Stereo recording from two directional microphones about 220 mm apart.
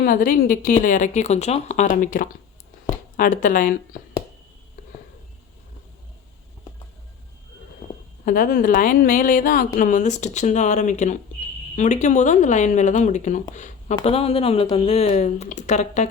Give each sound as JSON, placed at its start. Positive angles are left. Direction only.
{"t": 0.0, "sound": "a woman's voice", "side_deg": 40}
{"t": 8.2, "sound": "a woman's voice", "side_deg": 40}
{"t": 13.5, "sound": "a sound", "side_deg": 30}
{"t": 13.9, "sound": "speech", "side_deg": 25}